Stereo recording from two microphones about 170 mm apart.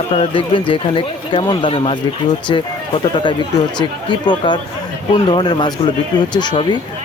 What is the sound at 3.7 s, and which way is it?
Speech, 25° left (ahead or behind).